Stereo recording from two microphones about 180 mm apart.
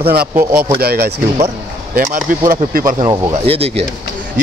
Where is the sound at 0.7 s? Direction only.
60° right (ahead or behind).